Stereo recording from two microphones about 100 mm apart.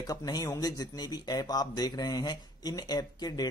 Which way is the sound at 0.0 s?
40° left (ahead or behind).